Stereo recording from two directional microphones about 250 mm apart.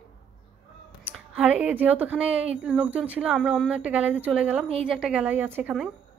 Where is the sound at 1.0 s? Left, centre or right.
Centre.